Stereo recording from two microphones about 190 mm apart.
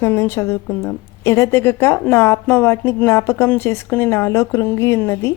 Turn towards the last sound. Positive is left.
turn(degrees=15)  # may be behind; listen again after turning